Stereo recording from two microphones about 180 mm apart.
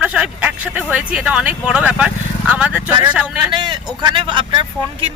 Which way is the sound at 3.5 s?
25° right (ahead or behind).